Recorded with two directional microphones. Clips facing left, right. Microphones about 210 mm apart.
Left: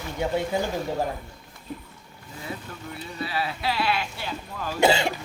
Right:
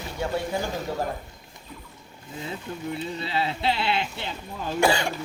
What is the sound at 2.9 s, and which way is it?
Speech, 25° right (ahead or behind).